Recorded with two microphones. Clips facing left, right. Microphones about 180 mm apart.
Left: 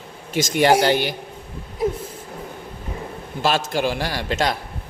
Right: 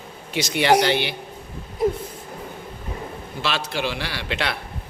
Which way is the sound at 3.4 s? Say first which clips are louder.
Left 5 dB; 45° left (ahead or behind).